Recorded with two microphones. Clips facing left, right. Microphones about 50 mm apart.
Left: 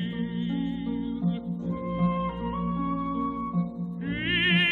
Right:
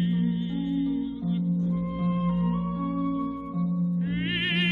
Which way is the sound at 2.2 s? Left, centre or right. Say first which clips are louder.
Right 3 dB; centre.